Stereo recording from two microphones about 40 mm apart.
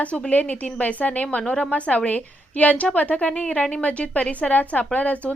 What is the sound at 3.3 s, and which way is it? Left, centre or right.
A woman's voice, left.